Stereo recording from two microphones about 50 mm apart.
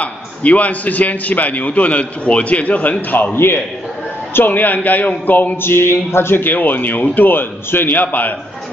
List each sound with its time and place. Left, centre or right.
0.0 s a man's voice: left
3.3 s a man's voice: left
4.3 s a man's voice: left
5.6 s a man's voice: left